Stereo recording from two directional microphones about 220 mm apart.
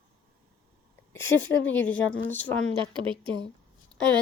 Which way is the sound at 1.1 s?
10° left (ahead or behind).